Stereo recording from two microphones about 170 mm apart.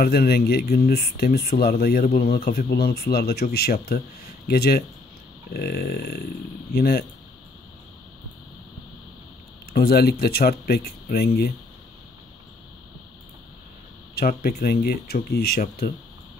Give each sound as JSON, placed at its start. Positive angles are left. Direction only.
{"t": 0.0, "sound": "speech", "side_deg": 65}
{"t": 9.7, "sound": "speech", "side_deg": 65}
{"t": 14.1, "sound": "speech", "side_deg": 60}